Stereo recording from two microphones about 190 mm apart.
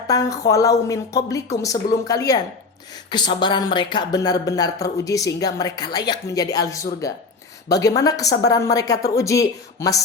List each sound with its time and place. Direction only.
0.1 s speech: 20° left (ahead or behind)